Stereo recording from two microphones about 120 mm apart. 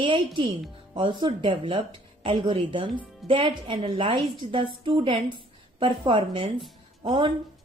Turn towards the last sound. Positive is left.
turn(degrees=-40)  # may be behind; listen again after turning